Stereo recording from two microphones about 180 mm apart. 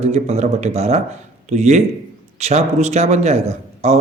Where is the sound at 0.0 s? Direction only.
35° right (ahead or behind).